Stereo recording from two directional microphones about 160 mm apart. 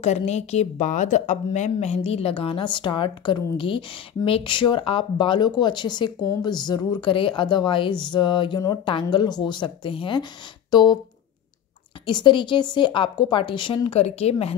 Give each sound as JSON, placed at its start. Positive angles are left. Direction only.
{"t": 0.0, "sound": "a woman's voice", "side_deg": 45}
{"t": 12.1, "sound": "a woman's voice", "side_deg": 30}